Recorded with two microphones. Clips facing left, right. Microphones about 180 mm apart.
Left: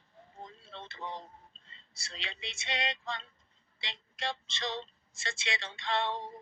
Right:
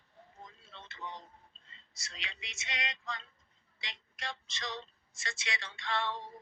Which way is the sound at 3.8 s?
30° left (ahead or behind).